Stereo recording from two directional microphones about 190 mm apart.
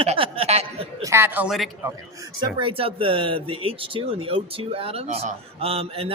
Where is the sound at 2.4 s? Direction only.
25° right (ahead or behind).